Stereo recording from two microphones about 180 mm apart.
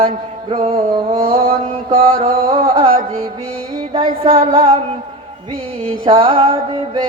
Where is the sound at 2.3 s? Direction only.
50° right (ahead or behind).